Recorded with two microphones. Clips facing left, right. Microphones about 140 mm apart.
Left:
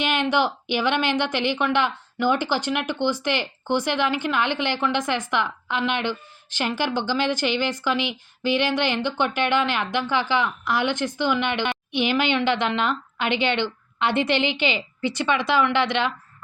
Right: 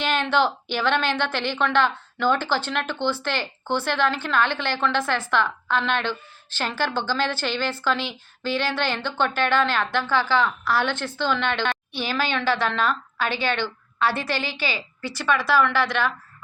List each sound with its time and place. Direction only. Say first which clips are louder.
0.0 s a woman's voice: even; 15° left (ahead or behind)